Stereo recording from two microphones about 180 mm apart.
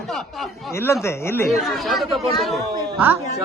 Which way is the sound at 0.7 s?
15° left (ahead or behind).